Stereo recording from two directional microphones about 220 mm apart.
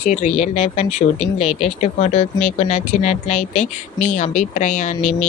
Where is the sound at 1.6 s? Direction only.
30° left (ahead or behind).